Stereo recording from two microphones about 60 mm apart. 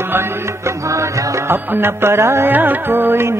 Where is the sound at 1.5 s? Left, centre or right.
Right.